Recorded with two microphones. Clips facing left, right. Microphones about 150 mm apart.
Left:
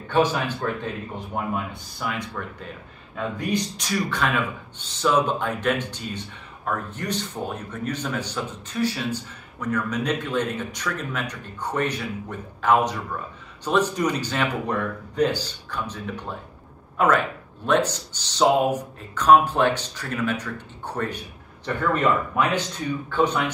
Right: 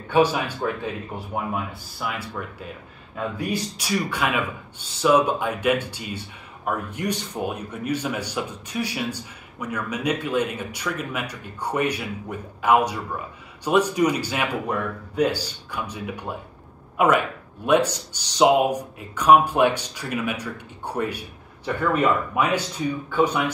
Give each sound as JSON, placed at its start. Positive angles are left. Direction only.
{"t": 0.1, "sound": "a man's voice", "side_deg": -10}